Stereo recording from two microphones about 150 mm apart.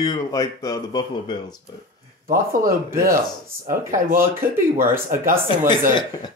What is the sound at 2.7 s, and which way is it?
Speech, 20° right (ahead or behind).